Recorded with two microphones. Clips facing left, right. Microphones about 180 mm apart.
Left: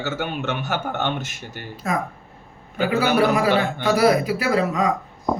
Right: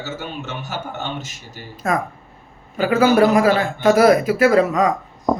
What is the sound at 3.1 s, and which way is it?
Speech, 45° right (ahead or behind).